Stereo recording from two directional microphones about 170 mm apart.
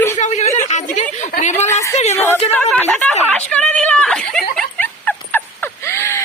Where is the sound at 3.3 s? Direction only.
5° left (ahead or behind).